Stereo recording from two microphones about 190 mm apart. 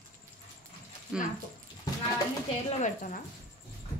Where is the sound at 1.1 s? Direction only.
5° right (ahead or behind).